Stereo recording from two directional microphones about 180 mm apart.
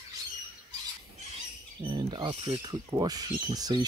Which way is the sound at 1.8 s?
25° right (ahead or behind).